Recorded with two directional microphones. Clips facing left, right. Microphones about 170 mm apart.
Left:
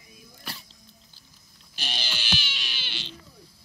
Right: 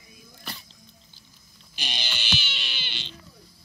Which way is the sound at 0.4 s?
5° left (ahead or behind).